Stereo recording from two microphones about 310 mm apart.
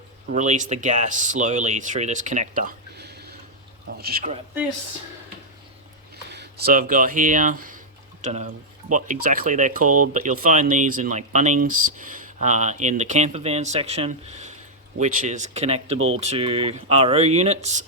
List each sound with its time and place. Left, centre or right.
0.3 s speech: right
6.3 s speech: right
16.0 s speech: right
16.2 s speech: centre